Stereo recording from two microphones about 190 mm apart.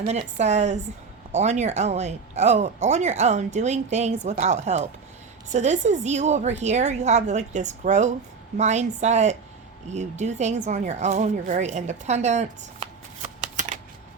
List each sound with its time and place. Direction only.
0.1 s speech: 35° right (ahead or behind)